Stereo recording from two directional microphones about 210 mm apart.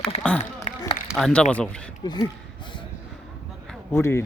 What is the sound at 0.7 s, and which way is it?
Run, 35° left (ahead or behind).